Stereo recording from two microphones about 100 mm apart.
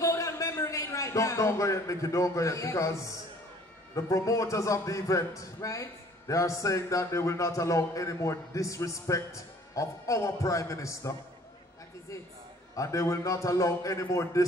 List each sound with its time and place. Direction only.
0.0 s a man's voice: 30° left (ahead or behind)
12.7 s a man's voice: 30° left (ahead or behind)